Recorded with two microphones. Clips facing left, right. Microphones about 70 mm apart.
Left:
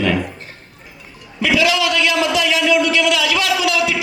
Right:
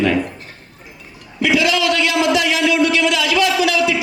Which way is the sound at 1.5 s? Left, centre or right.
Right.